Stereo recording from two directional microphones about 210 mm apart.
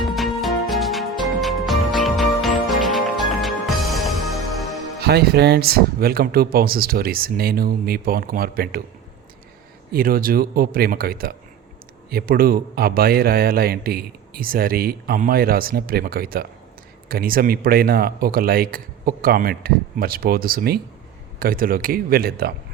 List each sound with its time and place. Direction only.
0.0 s music: centre (ahead or behind)
4.9 s a man's voice: 50° right (ahead or behind)
9.9 s a man's voice: 45° right (ahead or behind)